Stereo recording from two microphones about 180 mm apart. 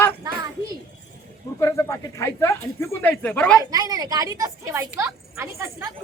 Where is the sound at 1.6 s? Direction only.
15° left (ahead or behind).